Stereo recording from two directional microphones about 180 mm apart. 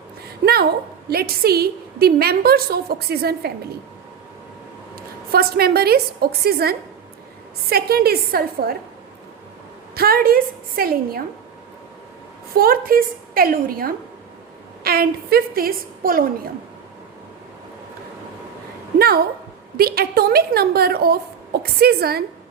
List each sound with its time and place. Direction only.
0.4 s a sound: 60° right (ahead or behind)
1.1 s a woman's voice: 60° right (ahead or behind)
4.9 s a woman's voice: 55° right (ahead or behind)
9.9 s a woman's voice: 55° right (ahead or behind)
12.5 s a woman's voice: 55° right (ahead or behind)
18.9 s a woman's voice: 60° right (ahead or behind)